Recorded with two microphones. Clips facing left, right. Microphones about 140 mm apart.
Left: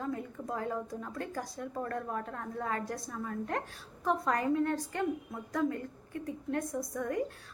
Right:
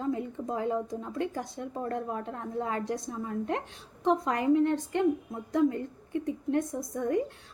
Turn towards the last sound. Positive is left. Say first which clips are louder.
# right 5 dB
turn(degrees=-25)  # may be behind; listen again after turning